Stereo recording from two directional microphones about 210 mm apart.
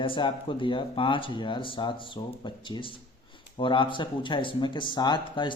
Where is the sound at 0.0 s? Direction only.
25° left (ahead or behind).